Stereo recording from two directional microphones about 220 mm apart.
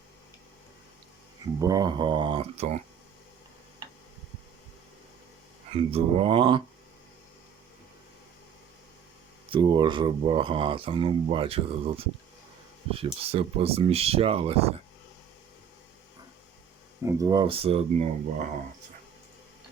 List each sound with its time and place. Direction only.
1.5 s speech: 15° right (ahead or behind)
5.7 s speech: 25° right (ahead or behind)
9.5 s speech: 20° right (ahead or behind)
17.0 s speech: 15° right (ahead or behind); by 18.4 s 30° right (ahead or behind)